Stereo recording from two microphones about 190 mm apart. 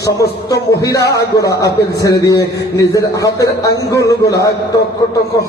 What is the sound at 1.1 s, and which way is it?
Speech, 20° left (ahead or behind).